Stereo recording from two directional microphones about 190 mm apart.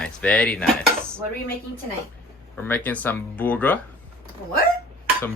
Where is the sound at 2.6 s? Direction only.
10° left (ahead or behind).